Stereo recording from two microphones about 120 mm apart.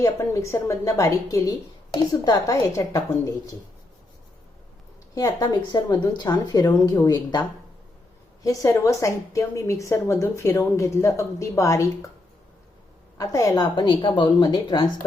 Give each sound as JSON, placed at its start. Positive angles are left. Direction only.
{"t": 0.0, "sound": "a woman's voice", "side_deg": 25}
{"t": 5.1, "sound": "a woman's voice", "side_deg": 30}
{"t": 8.4, "sound": "a woman's voice", "side_deg": 25}
{"t": 13.1, "sound": "a woman's voice", "side_deg": 30}